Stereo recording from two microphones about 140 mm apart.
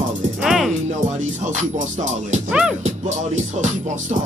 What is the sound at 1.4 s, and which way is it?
Speech, 60° right (ahead or behind).